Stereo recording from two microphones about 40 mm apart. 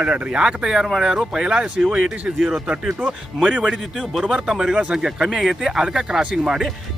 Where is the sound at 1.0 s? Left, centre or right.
Centre.